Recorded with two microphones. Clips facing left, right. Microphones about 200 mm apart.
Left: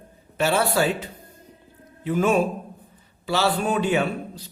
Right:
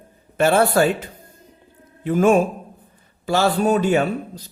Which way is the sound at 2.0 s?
50° right (ahead or behind).